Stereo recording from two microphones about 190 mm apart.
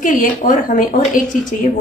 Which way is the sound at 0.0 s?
40° left (ahead or behind).